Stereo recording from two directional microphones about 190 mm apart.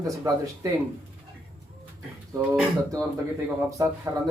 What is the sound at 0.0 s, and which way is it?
Speech, 15° right (ahead or behind).